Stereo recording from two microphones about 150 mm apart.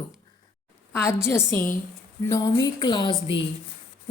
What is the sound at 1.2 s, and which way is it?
A woman's voice, 15° left (ahead or behind).